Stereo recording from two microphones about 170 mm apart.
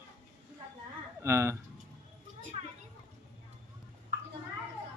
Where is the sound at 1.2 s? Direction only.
15° right (ahead or behind).